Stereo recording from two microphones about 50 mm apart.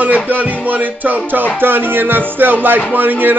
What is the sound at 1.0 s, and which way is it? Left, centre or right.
Music, right.